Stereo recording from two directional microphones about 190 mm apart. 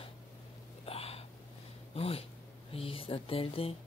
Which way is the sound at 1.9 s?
30° left (ahead or behind).